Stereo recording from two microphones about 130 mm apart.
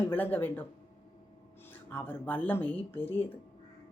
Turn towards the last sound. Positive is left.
turn(degrees=15)  # may be behind; listen again after turning